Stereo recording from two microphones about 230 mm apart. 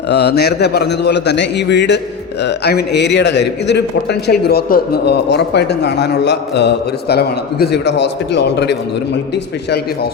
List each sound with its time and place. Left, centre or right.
0.1 s a man's voice: left